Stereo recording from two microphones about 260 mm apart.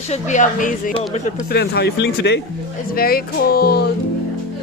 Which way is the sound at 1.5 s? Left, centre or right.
Left.